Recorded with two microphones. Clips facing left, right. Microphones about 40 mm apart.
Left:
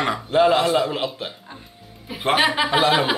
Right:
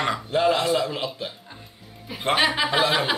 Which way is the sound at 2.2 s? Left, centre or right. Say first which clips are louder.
Left 2 dB; centre.